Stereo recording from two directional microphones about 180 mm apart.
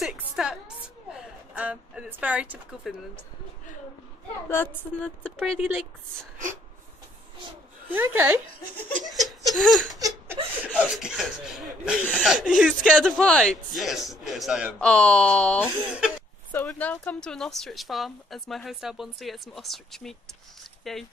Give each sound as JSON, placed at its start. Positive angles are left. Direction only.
{"t": 0.0, "sound": "a woman's voice", "side_deg": 0}
{"t": 4.5, "sound": "a woman's voice", "side_deg": 10}
{"t": 7.9, "sound": "speech", "side_deg": -10}
{"t": 9.0, "sound": "laughter", "side_deg": 0}
{"t": 9.9, "sound": "speech", "side_deg": -15}